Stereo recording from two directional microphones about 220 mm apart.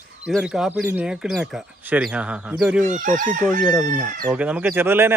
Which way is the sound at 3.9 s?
5° right (ahead or behind).